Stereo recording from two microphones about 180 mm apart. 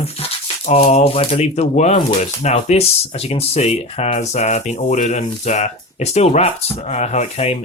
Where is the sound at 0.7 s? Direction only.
40° left (ahead or behind).